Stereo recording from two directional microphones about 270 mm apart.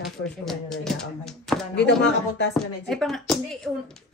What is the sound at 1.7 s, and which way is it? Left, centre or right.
Speech, left.